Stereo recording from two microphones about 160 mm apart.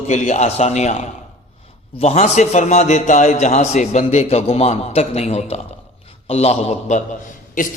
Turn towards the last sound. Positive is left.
turn(degrees=50)  # may be behind; listen again after turning